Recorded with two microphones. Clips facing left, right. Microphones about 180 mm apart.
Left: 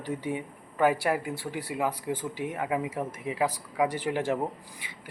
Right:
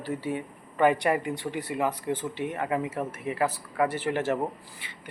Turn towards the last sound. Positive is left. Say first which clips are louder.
# even
turn(degrees=10)  # may be behind; listen again after turning